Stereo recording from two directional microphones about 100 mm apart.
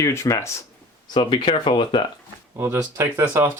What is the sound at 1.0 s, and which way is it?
Speech, 55° left (ahead or behind).